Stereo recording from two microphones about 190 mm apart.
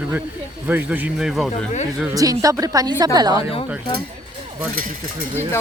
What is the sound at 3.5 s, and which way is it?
Speech, 30° left (ahead or behind).